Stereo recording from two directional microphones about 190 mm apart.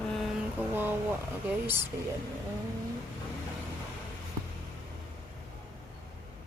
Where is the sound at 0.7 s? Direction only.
10° right (ahead or behind).